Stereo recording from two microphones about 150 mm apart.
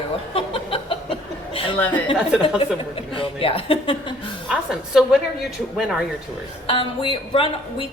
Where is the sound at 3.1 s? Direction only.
35° left (ahead or behind).